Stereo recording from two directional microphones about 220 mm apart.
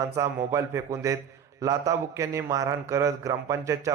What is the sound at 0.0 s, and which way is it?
A man's voice, 15° right (ahead or behind).